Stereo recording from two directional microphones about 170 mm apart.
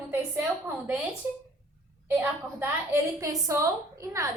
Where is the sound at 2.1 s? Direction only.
15° right (ahead or behind).